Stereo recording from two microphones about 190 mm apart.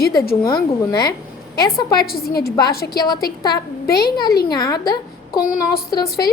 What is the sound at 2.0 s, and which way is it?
Speech, 55° left (ahead or behind).